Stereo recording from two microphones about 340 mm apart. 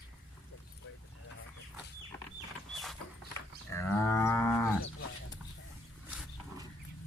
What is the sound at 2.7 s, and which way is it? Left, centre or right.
Dog, centre.